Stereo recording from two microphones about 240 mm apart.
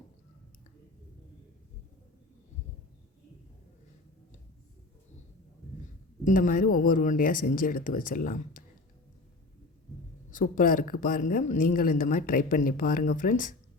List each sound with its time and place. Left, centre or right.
6.2 s speech: left
10.3 s speech: left